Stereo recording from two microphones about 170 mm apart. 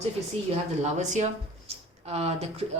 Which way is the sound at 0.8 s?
45° right (ahead or behind).